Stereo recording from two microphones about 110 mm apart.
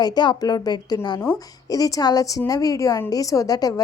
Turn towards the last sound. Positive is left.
turn(degrees=35)  # may be behind; listen again after turning